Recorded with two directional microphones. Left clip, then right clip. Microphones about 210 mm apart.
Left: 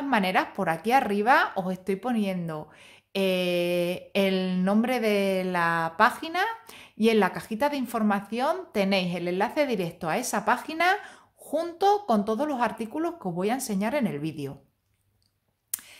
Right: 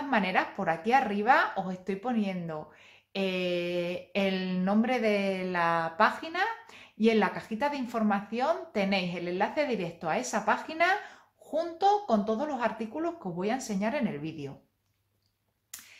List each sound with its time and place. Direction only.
0.1 s speech: 35° left (ahead or behind)